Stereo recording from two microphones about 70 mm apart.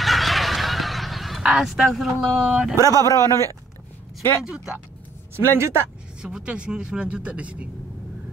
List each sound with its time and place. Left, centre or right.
0.0 s fowl: centre
1.4 s speech: centre
2.7 s speech: right
4.5 s speech: centre
5.3 s speech: right
6.2 s speech: centre